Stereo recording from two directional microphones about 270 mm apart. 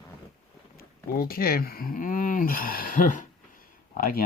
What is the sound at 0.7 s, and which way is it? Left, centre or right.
Speech, left.